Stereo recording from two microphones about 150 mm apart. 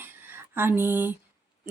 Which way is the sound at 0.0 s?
15° right (ahead or behind).